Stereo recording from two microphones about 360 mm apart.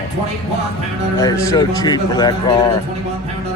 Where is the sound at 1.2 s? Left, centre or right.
Centre.